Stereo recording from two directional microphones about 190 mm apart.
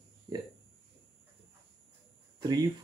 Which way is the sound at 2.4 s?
20° right (ahead or behind).